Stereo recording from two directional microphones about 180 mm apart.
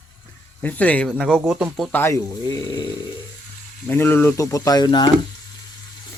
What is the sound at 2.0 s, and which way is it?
Speech, 15° left (ahead or behind).